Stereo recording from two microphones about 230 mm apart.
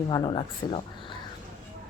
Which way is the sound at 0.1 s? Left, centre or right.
Centre.